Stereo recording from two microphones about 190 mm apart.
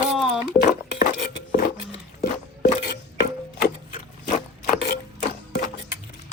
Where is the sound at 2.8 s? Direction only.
55° left (ahead or behind).